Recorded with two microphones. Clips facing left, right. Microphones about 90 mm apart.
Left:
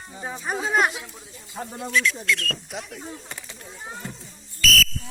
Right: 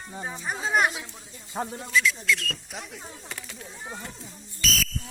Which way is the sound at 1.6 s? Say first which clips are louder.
Right 3 dB; 30° right (ahead or behind).